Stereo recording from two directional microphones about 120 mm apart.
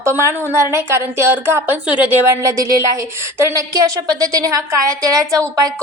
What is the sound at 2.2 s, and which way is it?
A woman's voice, 25° right (ahead or behind).